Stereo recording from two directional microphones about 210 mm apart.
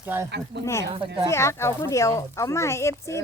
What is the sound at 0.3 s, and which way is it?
Speech, 55° right (ahead or behind).